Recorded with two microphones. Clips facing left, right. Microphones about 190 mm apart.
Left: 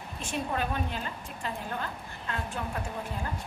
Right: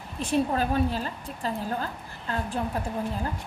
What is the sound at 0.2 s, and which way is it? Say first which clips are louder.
A woman's voice: right 7 dB; 35° right (ahead or behind).